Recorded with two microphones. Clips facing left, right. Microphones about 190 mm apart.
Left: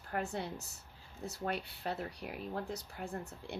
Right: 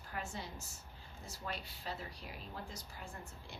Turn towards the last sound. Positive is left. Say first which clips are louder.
# left 9 dB
turn(degrees=65)  # may be behind; listen again after turning